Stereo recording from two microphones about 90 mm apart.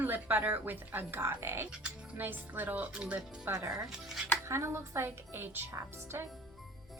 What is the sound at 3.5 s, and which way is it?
A woman's voice, 40° right (ahead or behind).